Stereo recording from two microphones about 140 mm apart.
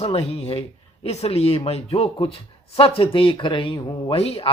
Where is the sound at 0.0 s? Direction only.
45° left (ahead or behind).